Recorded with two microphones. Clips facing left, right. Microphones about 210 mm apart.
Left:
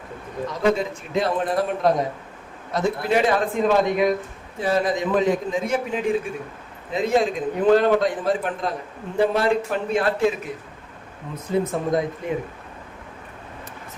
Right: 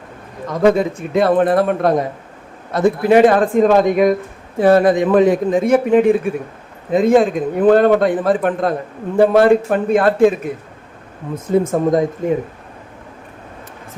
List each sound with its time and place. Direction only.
0.4 s a man's voice: 50° right (ahead or behind)
11.5 s a man's voice: 45° right (ahead or behind)